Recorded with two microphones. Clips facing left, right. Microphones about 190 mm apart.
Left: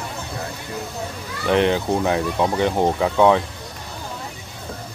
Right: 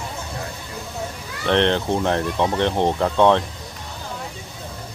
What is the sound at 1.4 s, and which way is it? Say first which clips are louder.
Speech: left 1 dB; 5° left (ahead or behind).